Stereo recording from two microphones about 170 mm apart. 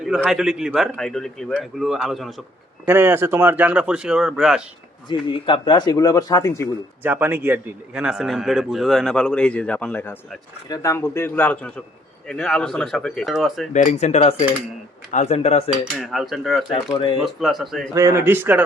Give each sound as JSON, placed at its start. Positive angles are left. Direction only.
{"t": 0.0, "sound": "a man's voice", "side_deg": -5}
{"t": 2.8, "sound": "speech", "side_deg": -15}
{"t": 5.0, "sound": "speech", "side_deg": 30}
{"t": 7.0, "sound": "a man's voice", "side_deg": -10}
{"t": 13.7, "sound": "speech", "side_deg": 45}
{"t": 16.0, "sound": "a man's voice", "side_deg": 0}
{"t": 16.9, "sound": "speech", "side_deg": 30}
{"t": 17.2, "sound": "a man's voice", "side_deg": 0}
{"t": 17.9, "sound": "speech", "side_deg": -15}